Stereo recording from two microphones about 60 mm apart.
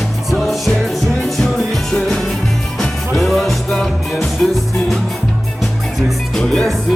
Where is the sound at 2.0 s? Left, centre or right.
Centre.